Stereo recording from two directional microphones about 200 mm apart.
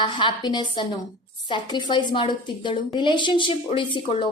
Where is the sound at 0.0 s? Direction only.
25° left (ahead or behind).